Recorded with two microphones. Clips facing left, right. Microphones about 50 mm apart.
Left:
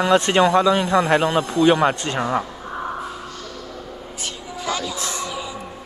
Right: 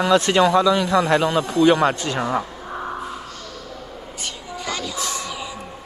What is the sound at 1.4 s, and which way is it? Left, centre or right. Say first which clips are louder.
Speech: even; centre.